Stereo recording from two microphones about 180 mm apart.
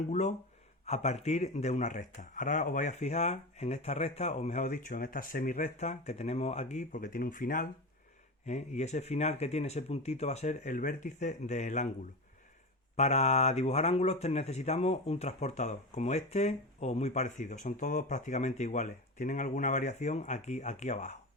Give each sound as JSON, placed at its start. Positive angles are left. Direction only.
{"t": 0.1, "sound": "speech", "side_deg": 40}
{"t": 8.4, "sound": "speech", "side_deg": 40}
{"t": 13.0, "sound": "speech", "side_deg": 35}